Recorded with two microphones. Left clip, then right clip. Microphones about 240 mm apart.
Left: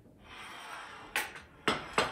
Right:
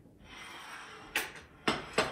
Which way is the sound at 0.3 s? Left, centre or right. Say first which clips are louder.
Left 1 dB; centre.